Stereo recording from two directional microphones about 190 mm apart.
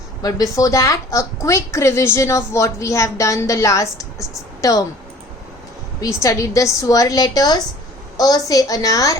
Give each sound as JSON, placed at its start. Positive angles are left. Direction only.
{"t": 0.2, "sound": "a woman's voice", "side_deg": 20}
{"t": 6.2, "sound": "a woman's voice", "side_deg": 15}